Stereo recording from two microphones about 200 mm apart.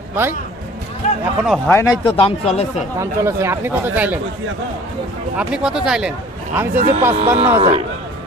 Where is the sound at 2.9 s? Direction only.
15° right (ahead or behind).